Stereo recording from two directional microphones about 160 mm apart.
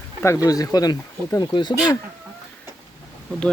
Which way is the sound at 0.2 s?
20° left (ahead or behind).